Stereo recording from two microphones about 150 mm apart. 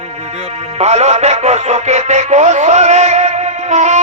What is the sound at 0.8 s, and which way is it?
Music, 50° right (ahead or behind).